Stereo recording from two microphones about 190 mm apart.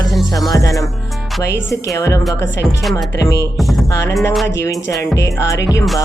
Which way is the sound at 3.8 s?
15° left (ahead or behind).